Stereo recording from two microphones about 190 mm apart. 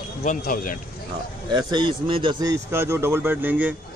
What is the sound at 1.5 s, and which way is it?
A man's voice, 25° right (ahead or behind).